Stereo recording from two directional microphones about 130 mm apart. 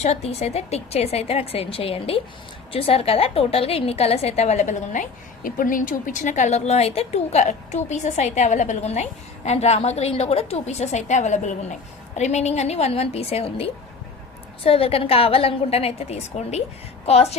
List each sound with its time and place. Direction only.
0.0 s a woman's voice: 55° left (ahead or behind)